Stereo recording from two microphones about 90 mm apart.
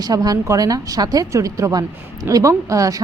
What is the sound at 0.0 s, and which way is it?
A woman's voice, 45° right (ahead or behind).